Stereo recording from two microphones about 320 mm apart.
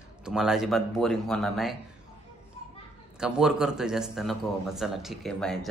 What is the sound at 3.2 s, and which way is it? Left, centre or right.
Speech, centre.